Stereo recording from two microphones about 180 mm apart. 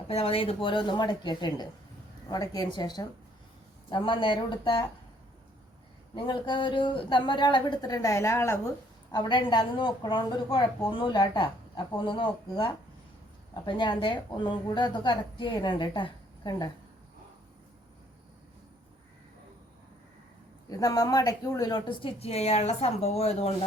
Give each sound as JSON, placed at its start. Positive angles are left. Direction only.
{"t": 0.1, "sound": "a woman's voice", "side_deg": 30}
{"t": 6.1, "sound": "a woman's voice", "side_deg": 25}
{"t": 9.1, "sound": "a woman's voice", "side_deg": 25}
{"t": 20.7, "sound": "a woman's voice", "side_deg": 20}